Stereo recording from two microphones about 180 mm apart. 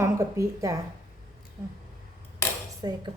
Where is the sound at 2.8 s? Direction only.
20° right (ahead or behind).